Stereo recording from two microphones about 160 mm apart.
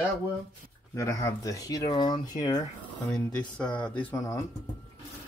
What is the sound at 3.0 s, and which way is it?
Speech, 5° left (ahead or behind).